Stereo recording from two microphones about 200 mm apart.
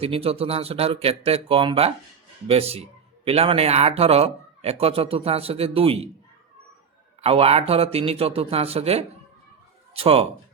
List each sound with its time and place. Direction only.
0.0 s speech: 30° right (ahead or behind)
7.2 s speech: 30° right (ahead or behind)